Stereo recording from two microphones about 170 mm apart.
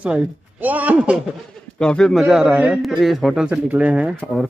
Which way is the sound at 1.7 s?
5° left (ahead or behind).